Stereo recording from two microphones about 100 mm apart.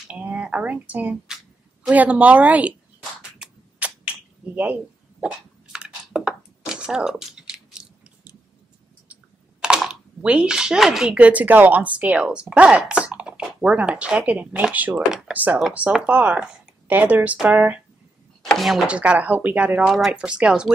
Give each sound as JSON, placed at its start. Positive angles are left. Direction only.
{"t": 0.0, "sound": "speech", "side_deg": -15}
{"t": 3.0, "sound": "a sound", "side_deg": -10}
{"t": 9.1, "sound": "a woman's voice", "side_deg": -10}
{"t": 18.4, "sound": "speech", "side_deg": 0}
{"t": 18.9, "sound": "a woman's voice", "side_deg": -10}